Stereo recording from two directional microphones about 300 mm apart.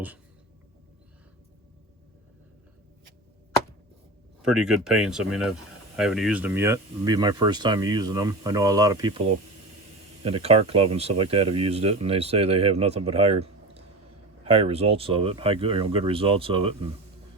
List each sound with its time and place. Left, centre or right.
4.4 s speech: centre